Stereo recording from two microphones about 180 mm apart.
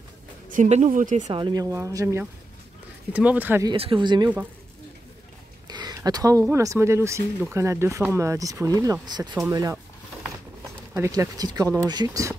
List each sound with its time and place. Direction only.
0.5 s speech: 40° right (ahead or behind)
1.3 s speech: 25° right (ahead or behind)
3.6 s speech: 30° right (ahead or behind)
5.7 s speech: 25° right (ahead or behind)
10.9 s speech: 15° right (ahead or behind)